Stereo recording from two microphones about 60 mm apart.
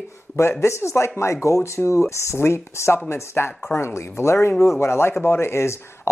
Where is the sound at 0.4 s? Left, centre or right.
Left.